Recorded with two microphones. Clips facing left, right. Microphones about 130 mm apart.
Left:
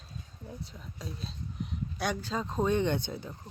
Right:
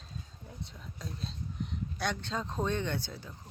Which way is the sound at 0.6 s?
5° left (ahead or behind).